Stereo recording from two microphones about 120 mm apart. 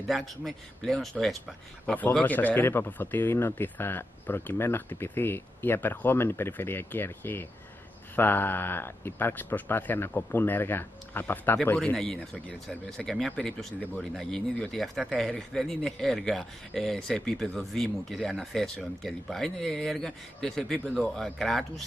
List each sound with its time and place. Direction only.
0.1 s speech: centre (ahead or behind)
2.0 s speech: 15° left (ahead or behind)